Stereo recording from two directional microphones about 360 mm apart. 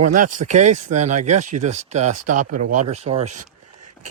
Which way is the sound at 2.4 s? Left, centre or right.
Right.